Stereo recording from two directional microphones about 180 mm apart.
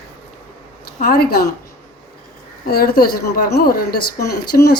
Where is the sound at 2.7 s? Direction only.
55° left (ahead or behind).